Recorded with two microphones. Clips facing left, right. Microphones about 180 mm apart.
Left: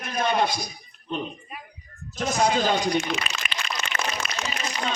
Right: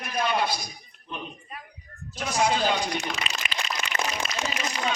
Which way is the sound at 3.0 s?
40° right (ahead or behind).